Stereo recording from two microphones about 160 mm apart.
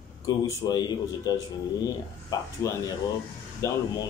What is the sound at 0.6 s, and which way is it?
Speech, 25° left (ahead or behind).